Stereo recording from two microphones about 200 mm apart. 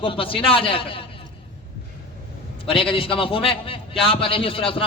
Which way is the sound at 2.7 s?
25° left (ahead or behind).